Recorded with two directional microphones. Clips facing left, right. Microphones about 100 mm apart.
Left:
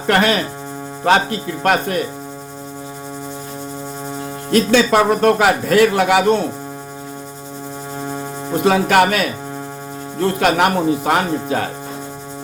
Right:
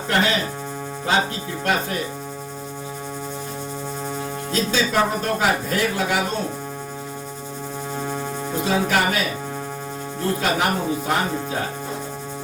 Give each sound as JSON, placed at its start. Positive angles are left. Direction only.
{"t": 0.1, "sound": "speech", "side_deg": 65}
{"t": 4.5, "sound": "speech", "side_deg": 75}
{"t": 8.6, "sound": "speech", "side_deg": 70}